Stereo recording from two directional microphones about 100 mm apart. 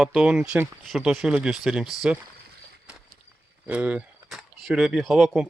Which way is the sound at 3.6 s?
15° right (ahead or behind).